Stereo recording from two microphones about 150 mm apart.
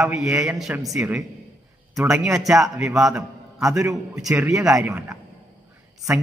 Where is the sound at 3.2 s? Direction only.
20° right (ahead or behind).